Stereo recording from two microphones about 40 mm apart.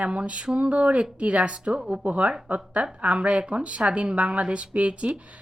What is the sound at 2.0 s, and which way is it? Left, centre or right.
A woman's voice, right.